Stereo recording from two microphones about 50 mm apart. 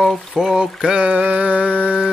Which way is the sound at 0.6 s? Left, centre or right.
Centre.